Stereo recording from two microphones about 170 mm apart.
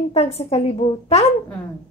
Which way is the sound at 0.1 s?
35° left (ahead or behind).